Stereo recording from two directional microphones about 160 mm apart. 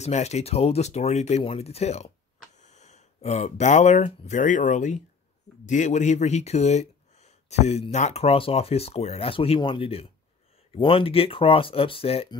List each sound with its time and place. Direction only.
0.0 s speech: 45° left (ahead or behind)